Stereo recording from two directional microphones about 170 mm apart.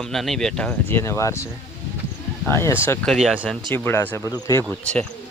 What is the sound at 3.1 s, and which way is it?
Speech, centre (ahead or behind).